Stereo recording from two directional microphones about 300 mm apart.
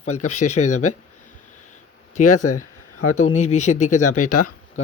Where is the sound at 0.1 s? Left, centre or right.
Left.